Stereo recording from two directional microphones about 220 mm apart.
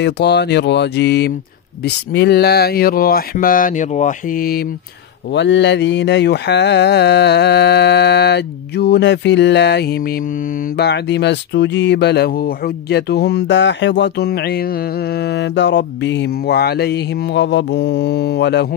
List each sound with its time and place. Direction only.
0.0 s speech: 50° left (ahead or behind)
5.3 s speech: 55° left (ahead or behind)